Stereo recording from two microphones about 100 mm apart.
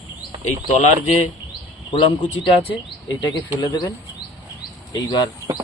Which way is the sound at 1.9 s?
55° left (ahead or behind).